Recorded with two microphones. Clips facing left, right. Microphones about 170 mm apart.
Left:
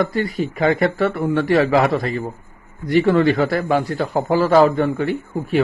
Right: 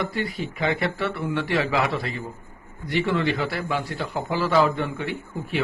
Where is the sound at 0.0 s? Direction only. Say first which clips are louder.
Left 7 dB; 45° left (ahead or behind).